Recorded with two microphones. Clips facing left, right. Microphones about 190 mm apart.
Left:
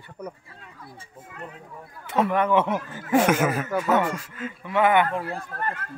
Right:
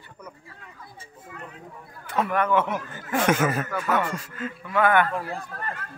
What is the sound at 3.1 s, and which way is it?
Speech, 10° left (ahead or behind).